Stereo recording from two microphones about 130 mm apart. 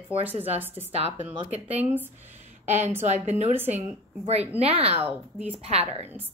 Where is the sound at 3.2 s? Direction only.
55° right (ahead or behind).